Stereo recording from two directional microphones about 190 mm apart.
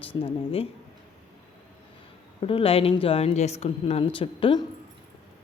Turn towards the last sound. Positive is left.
turn(degrees=25)  # may be behind; listen again after turning